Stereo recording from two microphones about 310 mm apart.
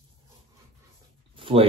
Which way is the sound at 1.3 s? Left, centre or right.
Centre.